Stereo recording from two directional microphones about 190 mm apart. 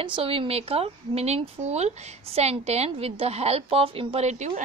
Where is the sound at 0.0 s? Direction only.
30° right (ahead or behind).